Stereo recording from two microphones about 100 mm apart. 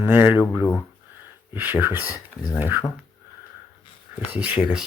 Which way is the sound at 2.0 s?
40° left (ahead or behind).